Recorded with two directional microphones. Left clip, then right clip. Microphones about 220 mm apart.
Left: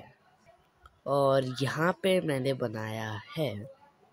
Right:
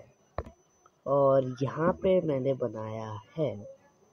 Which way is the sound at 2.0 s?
5° left (ahead or behind).